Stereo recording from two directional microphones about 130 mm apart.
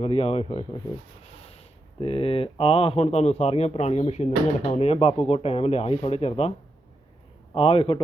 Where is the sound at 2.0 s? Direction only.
45° left (ahead or behind).